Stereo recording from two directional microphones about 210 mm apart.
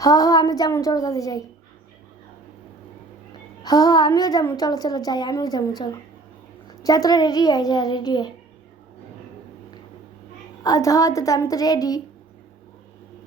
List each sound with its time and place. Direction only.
0.0 s a woman's voice: 15° left (ahead or behind)
3.6 s a woman's voice: 15° left (ahead or behind)
10.6 s a woman's voice: 15° left (ahead or behind)